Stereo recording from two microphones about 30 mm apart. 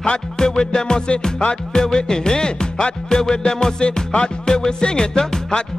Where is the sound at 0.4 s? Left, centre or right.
Left.